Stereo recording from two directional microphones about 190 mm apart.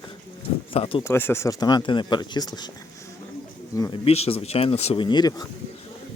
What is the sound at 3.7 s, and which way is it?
Speech, 20° left (ahead or behind).